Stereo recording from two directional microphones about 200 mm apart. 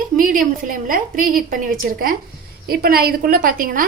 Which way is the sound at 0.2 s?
40° right (ahead or behind).